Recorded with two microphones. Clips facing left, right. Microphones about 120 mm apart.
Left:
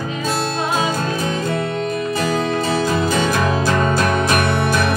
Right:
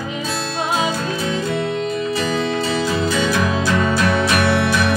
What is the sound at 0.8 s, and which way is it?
Music, 45° left (ahead or behind).